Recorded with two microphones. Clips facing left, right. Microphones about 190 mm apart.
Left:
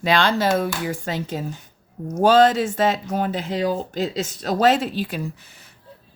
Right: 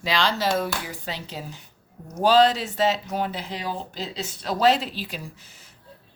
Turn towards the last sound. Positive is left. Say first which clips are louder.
# left 8 dB
turn(degrees=60)  # may be behind; listen again after turning